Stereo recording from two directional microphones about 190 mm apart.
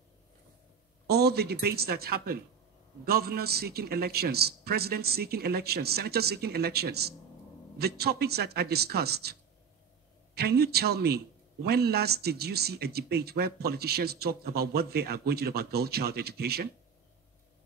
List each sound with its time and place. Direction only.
1.0 s a man's voice: 55° right (ahead or behind)